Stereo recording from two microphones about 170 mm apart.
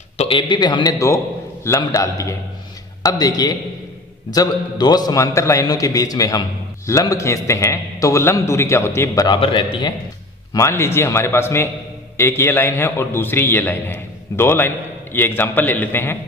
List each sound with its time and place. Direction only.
0.2 s a man's voice: 30° left (ahead or behind)
10.5 s a man's voice: 15° left (ahead or behind)